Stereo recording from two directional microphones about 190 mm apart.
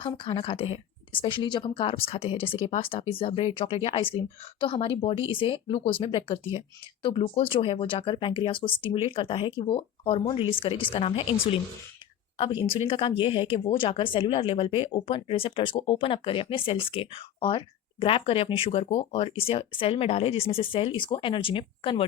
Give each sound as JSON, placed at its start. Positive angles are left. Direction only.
{"t": 0.0, "sound": "speech", "side_deg": 30}
{"t": 12.4, "sound": "speech", "side_deg": 25}